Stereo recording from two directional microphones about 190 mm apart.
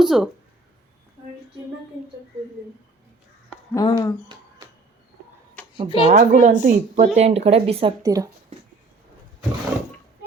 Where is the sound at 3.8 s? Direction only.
20° left (ahead or behind).